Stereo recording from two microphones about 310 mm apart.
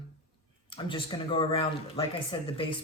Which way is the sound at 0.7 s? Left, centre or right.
Centre.